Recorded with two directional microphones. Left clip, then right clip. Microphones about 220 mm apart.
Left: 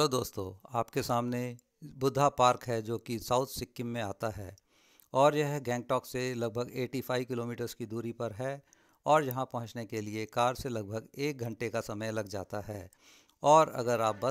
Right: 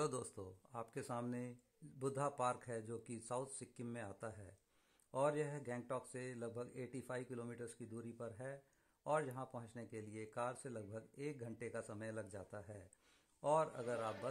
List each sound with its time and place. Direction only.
0.0 s speech: 35° left (ahead or behind)